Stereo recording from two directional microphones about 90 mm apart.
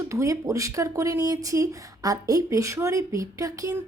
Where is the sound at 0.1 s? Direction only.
35° right (ahead or behind).